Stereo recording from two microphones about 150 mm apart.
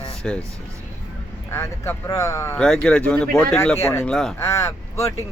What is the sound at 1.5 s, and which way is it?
Speech, 15° left (ahead or behind).